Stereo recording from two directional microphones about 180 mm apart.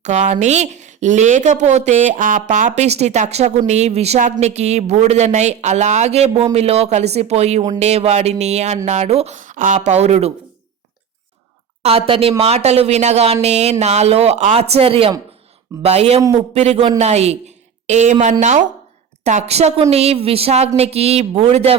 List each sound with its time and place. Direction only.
0.0 s speech: 40° right (ahead or behind)
11.8 s speech: 35° right (ahead or behind)